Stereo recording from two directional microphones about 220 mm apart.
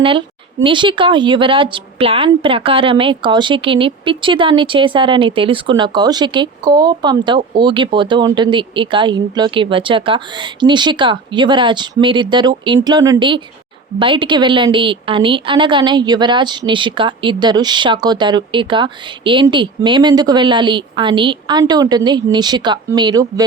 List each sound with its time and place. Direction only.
0.0 s speech: 25° right (ahead or behind)